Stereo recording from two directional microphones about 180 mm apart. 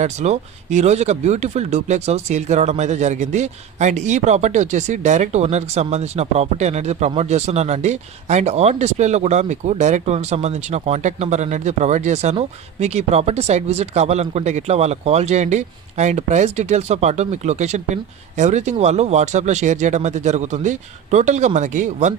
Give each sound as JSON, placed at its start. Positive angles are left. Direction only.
{"t": 0.0, "sound": "speech", "side_deg": -40}